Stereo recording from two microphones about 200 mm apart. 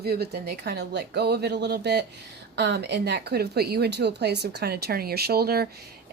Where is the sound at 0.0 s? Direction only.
50° right (ahead or behind).